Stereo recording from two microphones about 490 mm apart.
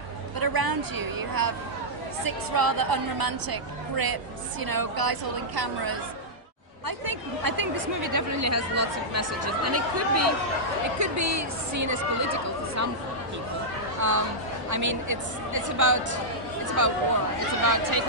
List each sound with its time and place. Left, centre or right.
0.4 s a woman's voice: right
7.1 s speech: right
14.0 s speech: right